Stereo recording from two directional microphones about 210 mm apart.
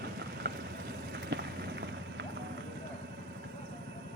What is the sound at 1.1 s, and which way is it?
Run, 55° right (ahead or behind).